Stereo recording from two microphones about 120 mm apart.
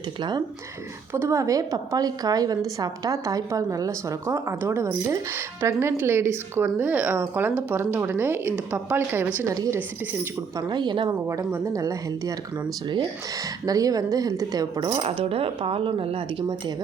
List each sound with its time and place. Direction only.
0.2 s speech: 40° right (ahead or behind)
1.1 s a woman's voice: 25° right (ahead or behind)
10.6 s speech: 40° right (ahead or behind)
11.3 s a woman's voice: 25° right (ahead or behind)
14.9 s speech: 55° right (ahead or behind)